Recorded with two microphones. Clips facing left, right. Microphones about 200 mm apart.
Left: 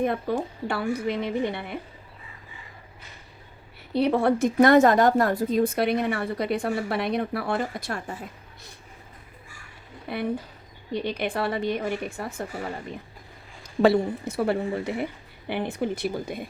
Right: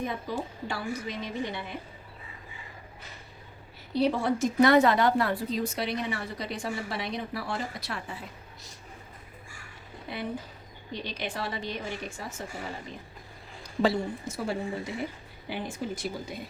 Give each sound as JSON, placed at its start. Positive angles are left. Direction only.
{"t": 0.0, "sound": "a woman's voice", "side_deg": 60}
{"t": 3.9, "sound": "a woman's voice", "side_deg": 60}
{"t": 10.1, "sound": "a woman's voice", "side_deg": 55}
{"t": 13.8, "sound": "a woman's voice", "side_deg": 60}